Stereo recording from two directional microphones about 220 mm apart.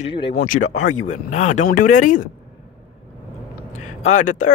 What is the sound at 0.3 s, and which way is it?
Speech, 40° left (ahead or behind).